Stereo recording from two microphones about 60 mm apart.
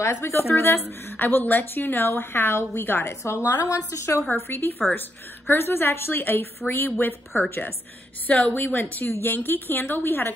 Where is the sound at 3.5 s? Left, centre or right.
Left.